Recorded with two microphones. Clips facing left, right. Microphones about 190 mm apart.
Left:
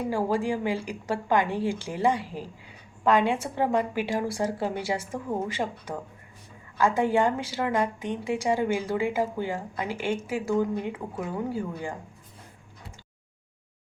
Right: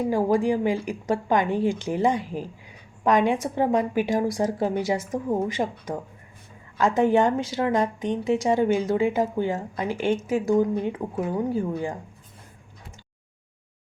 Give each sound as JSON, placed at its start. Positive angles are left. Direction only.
{"t": 0.1, "sound": "a woman's voice", "side_deg": -20}